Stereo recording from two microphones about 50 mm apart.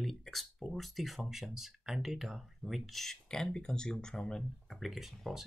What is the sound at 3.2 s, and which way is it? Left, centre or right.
Speech, centre.